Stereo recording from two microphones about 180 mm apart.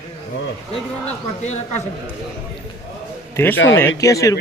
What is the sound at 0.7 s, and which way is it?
Speech, 35° left (ahead or behind).